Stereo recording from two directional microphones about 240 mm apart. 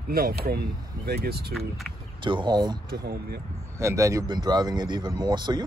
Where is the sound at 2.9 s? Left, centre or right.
Right.